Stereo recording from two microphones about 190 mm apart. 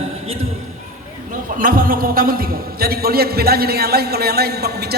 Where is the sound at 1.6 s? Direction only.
45° right (ahead or behind).